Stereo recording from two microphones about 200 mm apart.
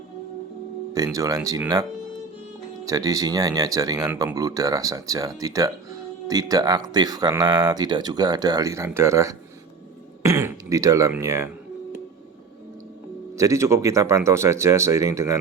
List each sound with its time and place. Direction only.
0.9 s speech: 15° right (ahead or behind)
13.3 s speech: 15° right (ahead or behind)